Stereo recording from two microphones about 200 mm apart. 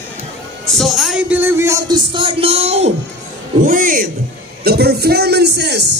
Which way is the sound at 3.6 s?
45° right (ahead or behind).